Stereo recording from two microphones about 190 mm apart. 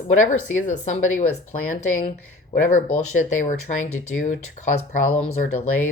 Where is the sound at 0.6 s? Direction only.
40° left (ahead or behind).